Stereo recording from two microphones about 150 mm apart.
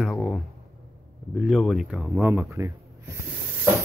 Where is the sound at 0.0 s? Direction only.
Centre (ahead or behind).